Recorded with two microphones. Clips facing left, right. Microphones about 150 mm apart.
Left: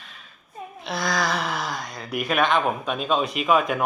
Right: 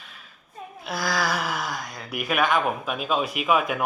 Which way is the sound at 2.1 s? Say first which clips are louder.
Left 1 dB; 5° right (ahead or behind).